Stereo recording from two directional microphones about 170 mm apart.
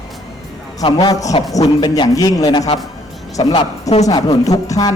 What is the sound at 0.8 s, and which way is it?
Speech, 25° left (ahead or behind).